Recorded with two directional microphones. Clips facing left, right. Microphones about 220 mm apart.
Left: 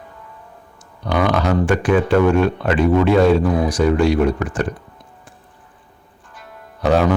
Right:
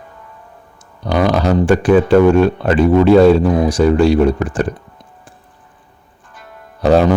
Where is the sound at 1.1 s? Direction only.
35° right (ahead or behind).